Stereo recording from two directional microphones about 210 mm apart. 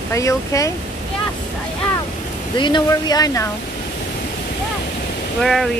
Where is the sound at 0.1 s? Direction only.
15° left (ahead or behind).